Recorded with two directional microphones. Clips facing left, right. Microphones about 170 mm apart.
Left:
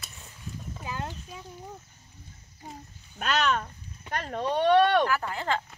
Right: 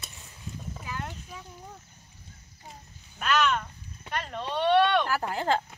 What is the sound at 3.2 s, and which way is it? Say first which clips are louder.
Speech: right 1 dB; 45° left (ahead or behind).